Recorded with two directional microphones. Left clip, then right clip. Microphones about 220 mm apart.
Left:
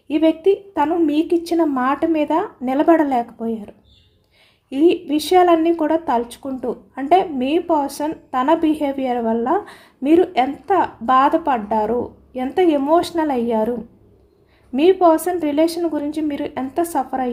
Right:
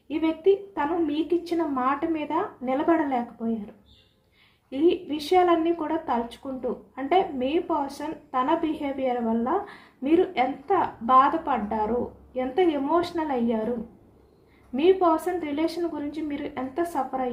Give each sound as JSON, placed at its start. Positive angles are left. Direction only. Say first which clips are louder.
{"t": 0.1, "sound": "a woman's voice", "louder": "left 7 dB", "side_deg": 50}
{"t": 4.7, "sound": "a woman's voice", "louder": "left 7 dB", "side_deg": 55}
{"t": 14.8, "sound": "a woman's voice", "louder": "left 7 dB", "side_deg": 55}